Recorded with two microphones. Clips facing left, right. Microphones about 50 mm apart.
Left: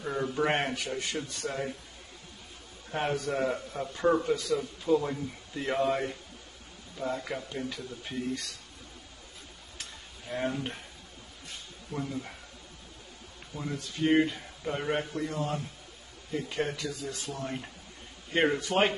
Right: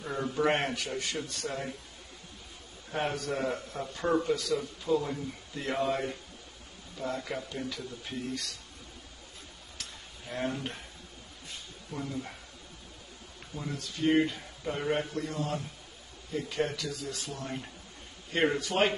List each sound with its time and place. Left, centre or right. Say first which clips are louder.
0.0 s a sound: even; centre
1.5 s speech: left 2 dB; centre
2.9 s a man's voice: left 2 dB; centre
10.2 s a man's voice: left 2 dB; centre
11.9 s a man's voice: left 1 dB; centre
13.5 s speech: left 2 dB; centre
17.2 s speech: left 2 dB; centre; by 18.9 s left